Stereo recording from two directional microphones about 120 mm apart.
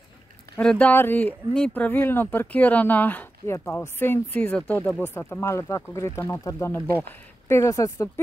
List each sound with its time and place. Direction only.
0.6 s speech: 10° left (ahead or behind); by 8.1 s 25° left (ahead or behind)